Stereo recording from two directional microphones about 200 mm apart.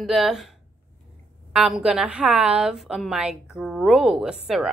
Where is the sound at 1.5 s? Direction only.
Centre (ahead or behind).